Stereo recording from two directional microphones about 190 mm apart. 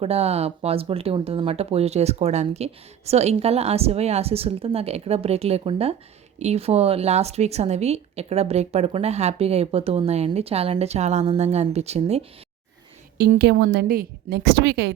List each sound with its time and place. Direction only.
0.0 s a woman's voice: 35° right (ahead or behind)
13.4 s a woman's voice: 60° right (ahead or behind)